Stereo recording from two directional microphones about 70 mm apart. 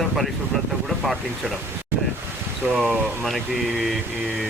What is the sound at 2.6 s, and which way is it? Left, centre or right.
Speech, right.